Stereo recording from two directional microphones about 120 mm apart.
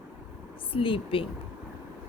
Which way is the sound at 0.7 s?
45° left (ahead or behind).